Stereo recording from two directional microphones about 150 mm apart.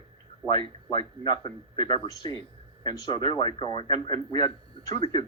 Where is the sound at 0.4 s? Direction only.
Centre (ahead or behind).